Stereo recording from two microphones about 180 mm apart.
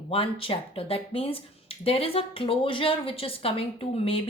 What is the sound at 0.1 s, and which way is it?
A woman's voice, 30° left (ahead or behind).